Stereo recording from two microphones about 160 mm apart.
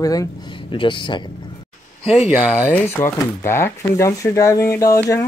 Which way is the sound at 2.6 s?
10° left (ahead or behind).